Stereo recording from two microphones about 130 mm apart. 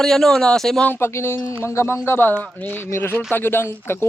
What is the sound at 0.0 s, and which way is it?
Speech, 5° left (ahead or behind).